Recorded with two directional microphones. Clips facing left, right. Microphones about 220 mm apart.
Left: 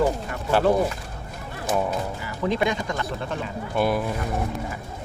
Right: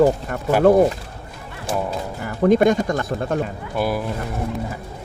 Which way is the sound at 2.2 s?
50° right (ahead or behind).